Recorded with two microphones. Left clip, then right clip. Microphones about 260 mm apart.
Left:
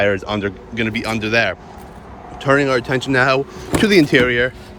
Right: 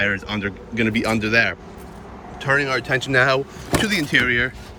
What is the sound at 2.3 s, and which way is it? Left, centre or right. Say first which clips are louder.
Speech: left 4 dB; centre.